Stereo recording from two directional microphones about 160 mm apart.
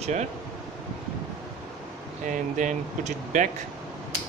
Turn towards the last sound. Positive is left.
turn(degrees=-50)  # may be behind; listen again after turning